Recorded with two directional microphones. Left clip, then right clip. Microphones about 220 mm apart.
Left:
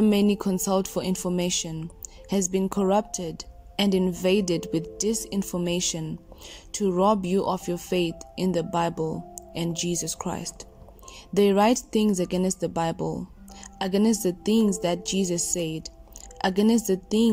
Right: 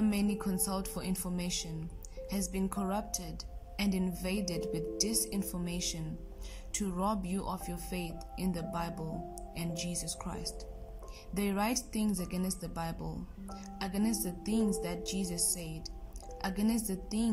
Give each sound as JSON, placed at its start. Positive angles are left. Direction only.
{"t": 0.0, "sound": "a woman's voice", "side_deg": 30}